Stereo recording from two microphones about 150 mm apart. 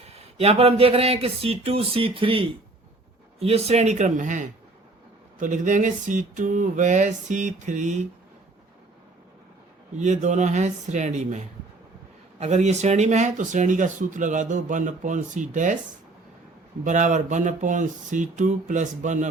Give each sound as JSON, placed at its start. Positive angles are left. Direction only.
{"t": 0.1, "sound": "speech", "side_deg": -45}
{"t": 10.0, "sound": "speech", "side_deg": -50}
{"t": 16.8, "sound": "speech", "side_deg": -55}